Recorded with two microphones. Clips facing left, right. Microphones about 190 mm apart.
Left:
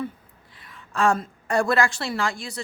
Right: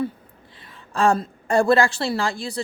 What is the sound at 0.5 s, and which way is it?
A woman's voice, 30° right (ahead or behind).